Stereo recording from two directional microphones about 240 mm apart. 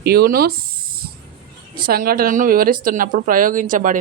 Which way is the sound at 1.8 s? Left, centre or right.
Right.